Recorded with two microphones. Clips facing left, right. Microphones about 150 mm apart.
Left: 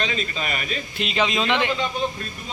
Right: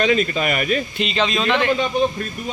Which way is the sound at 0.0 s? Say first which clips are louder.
Right 9 dB; 50° right (ahead or behind).